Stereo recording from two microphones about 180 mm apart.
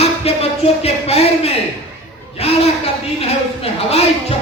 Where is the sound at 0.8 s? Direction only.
35° left (ahead or behind).